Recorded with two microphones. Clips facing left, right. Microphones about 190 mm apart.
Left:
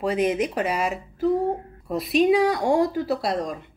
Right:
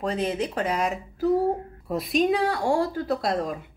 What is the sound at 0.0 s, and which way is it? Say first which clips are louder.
Speech: left 4 dB; 10° left (ahead or behind).